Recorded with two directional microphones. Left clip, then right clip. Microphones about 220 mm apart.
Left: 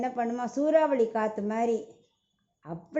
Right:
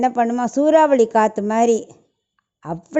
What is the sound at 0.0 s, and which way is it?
A woman's voice, 35° right (ahead or behind).